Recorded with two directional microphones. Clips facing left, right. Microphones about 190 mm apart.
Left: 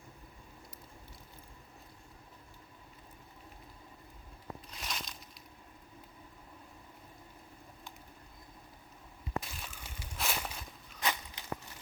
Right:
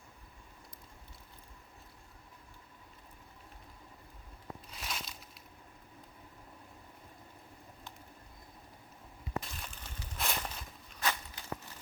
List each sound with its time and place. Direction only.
4.7 s crushing: 5° right (ahead or behind)
9.4 s crushing: 5° left (ahead or behind)
11.0 s a sound: 15° left (ahead or behind)